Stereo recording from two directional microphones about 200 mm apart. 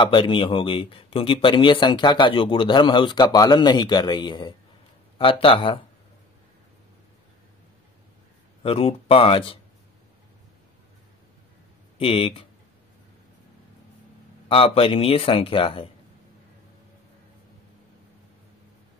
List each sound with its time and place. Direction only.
0.0 s a man's voice: 25° left (ahead or behind)
8.6 s a man's voice: 30° left (ahead or behind)
12.0 s a man's voice: 30° left (ahead or behind)
14.5 s a man's voice: 30° left (ahead or behind)